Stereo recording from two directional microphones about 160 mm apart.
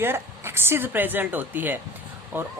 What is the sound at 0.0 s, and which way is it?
Speech, 15° right (ahead or behind).